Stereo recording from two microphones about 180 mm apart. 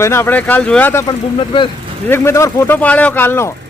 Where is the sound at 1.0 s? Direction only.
25° left (ahead or behind).